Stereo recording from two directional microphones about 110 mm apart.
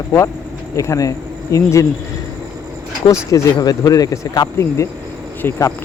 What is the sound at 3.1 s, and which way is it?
Speech, 30° left (ahead or behind).